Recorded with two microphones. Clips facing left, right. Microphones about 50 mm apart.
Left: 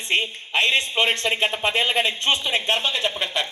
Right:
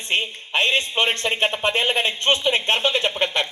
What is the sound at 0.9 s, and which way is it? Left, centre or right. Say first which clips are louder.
Speech: even; right.